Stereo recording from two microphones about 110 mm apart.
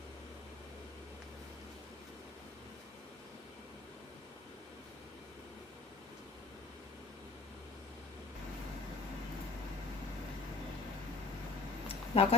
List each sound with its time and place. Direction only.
12.1 s speech: 60° left (ahead or behind)